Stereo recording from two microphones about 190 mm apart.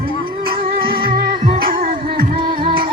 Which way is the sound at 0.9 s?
25° right (ahead or behind).